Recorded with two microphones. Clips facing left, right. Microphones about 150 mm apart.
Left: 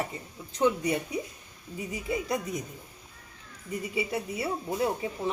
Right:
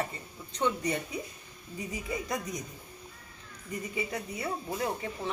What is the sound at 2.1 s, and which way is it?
Speech, 5° left (ahead or behind).